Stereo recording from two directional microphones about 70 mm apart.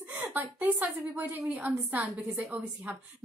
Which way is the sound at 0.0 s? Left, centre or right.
Right.